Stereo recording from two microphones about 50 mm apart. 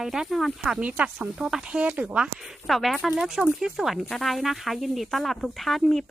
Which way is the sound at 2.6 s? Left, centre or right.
Centre.